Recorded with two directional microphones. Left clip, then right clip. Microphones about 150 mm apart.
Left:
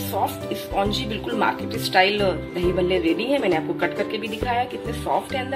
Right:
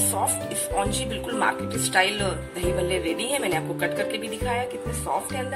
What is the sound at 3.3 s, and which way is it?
Speech, 5° left (ahead or behind).